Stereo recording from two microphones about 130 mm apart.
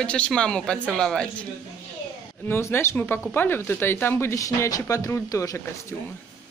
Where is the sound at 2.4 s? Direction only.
20° left (ahead or behind).